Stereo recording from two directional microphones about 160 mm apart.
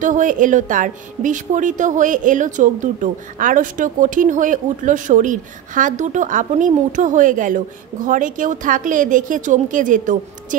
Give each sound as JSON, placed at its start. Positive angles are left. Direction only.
{"t": 0.0, "sound": "a woman's voice", "side_deg": -55}